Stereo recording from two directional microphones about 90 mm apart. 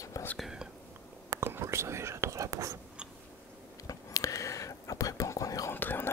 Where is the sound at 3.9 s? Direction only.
40° left (ahead or behind).